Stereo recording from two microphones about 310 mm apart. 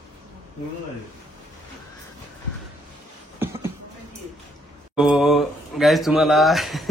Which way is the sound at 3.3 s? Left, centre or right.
Centre.